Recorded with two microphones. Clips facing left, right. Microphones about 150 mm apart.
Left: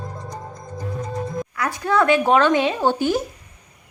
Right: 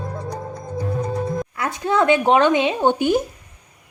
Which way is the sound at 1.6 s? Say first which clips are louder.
Even; 20° right (ahead or behind).